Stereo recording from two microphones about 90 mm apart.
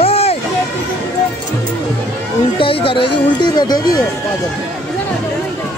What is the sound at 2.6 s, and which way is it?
Speech, 80° left.